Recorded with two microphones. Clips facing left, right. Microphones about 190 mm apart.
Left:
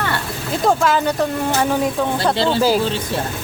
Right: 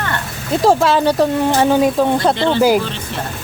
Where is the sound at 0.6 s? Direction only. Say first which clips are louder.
Right 4 dB; 30° right (ahead or behind).